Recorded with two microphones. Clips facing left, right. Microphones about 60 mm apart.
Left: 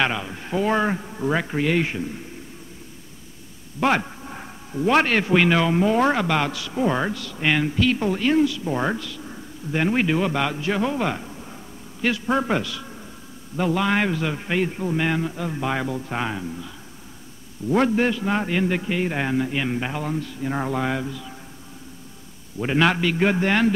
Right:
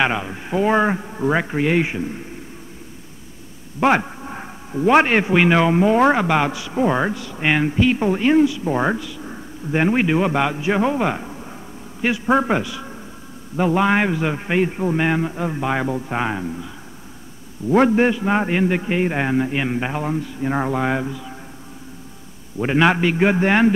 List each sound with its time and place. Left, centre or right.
0.0 s speech: centre
3.8 s a man's voice: centre
17.6 s a man's voice: right
22.6 s a man's voice: centre